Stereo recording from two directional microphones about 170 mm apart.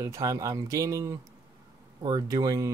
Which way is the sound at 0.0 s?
20° right (ahead or behind).